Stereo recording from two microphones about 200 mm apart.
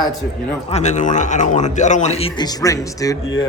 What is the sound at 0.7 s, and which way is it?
A man's voice, 35° left (ahead or behind).